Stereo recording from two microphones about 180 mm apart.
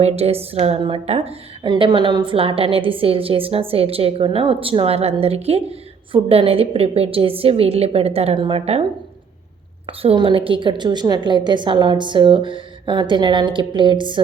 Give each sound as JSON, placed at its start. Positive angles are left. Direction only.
{"t": 0.0, "sound": "a woman's voice", "side_deg": -35}
{"t": 9.8, "sound": "a woman's voice", "side_deg": -30}